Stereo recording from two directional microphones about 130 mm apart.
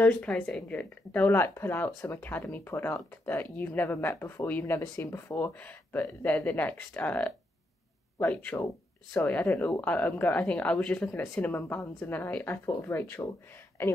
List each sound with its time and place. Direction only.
0.0 s speech: 10° left (ahead or behind)